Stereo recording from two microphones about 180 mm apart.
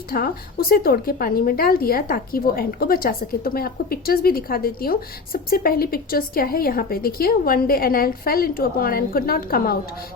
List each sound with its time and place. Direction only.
0.1 s a woman's voice: 55° left (ahead or behind)